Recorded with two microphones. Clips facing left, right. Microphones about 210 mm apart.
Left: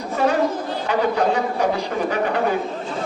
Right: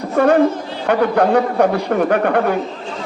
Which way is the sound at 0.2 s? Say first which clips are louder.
Right 7 dB; 55° right (ahead or behind).